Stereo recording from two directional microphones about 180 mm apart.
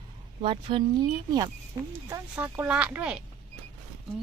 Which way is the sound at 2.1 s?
10° right (ahead or behind).